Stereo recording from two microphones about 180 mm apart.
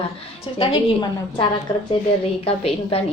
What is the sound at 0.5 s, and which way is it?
A woman's voice, 30° left (ahead or behind).